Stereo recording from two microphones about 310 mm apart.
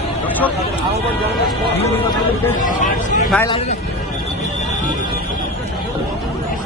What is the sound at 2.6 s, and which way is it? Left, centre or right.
Speech, left.